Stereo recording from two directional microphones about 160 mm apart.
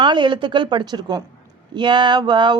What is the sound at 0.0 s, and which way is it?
Speech, 30° right (ahead or behind).